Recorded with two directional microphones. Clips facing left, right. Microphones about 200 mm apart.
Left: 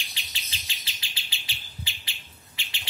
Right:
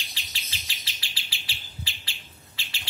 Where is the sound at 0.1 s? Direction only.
20° left (ahead or behind).